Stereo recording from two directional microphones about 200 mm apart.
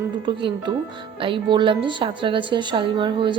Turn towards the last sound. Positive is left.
turn(degrees=-25)  # may be behind; listen again after turning